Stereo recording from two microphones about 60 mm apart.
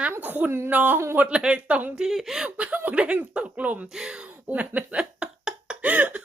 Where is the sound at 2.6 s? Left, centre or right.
Right.